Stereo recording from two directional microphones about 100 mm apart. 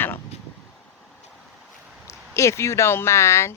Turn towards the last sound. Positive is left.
turn(degrees=30)  # may be behind; listen again after turning